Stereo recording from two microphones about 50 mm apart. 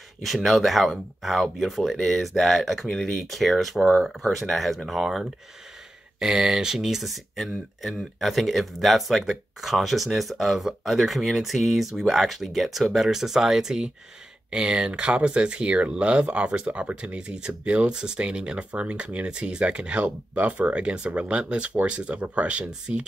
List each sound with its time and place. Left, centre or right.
0.2 s speech: centre
14.9 s speech: right